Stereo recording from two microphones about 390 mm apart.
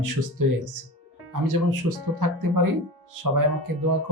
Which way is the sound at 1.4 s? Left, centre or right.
Right.